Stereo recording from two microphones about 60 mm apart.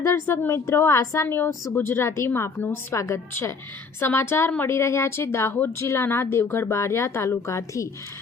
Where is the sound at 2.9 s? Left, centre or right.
Left.